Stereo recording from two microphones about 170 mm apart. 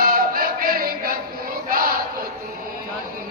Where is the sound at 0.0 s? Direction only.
60° right (ahead or behind).